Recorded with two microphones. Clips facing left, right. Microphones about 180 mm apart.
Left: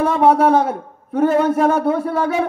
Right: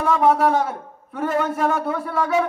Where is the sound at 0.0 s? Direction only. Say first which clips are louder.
Left 4 dB; 40° left (ahead or behind).